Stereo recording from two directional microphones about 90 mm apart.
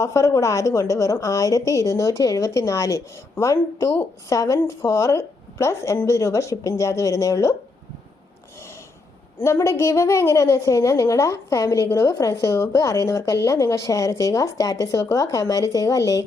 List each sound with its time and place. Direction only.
0.0 s a woman's voice: 35° left (ahead or behind)
9.4 s a woman's voice: 30° left (ahead or behind)